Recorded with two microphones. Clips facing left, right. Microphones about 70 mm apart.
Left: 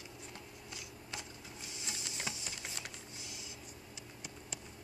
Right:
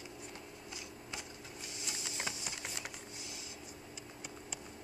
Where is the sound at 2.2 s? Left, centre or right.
Right.